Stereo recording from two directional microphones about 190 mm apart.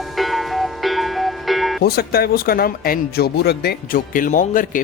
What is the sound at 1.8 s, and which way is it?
Speech, 55° left (ahead or behind).